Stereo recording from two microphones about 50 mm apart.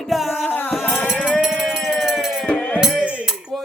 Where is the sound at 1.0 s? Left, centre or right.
Centre.